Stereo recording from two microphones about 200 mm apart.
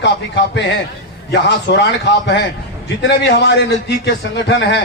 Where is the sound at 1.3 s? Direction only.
60° left (ahead or behind).